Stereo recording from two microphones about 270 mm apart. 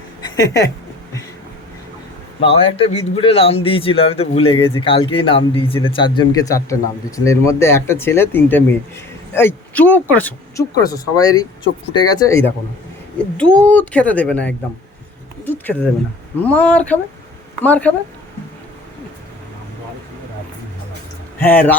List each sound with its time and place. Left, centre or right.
0.2 s a sound: centre
2.4 s speech: left; by 17.9 s centre
21.3 s speech: centre